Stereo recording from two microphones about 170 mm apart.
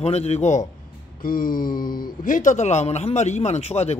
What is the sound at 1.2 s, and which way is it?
Speech, 55° left (ahead or behind).